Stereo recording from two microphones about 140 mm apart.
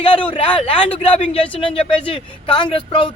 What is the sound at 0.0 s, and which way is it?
A man's voice, 40° left (ahead or behind).